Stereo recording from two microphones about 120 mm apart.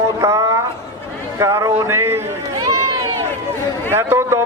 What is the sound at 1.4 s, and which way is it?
Speech, 25° right (ahead or behind).